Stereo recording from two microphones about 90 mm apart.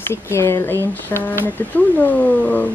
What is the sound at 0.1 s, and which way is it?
A woman's voice, 30° left (ahead or behind).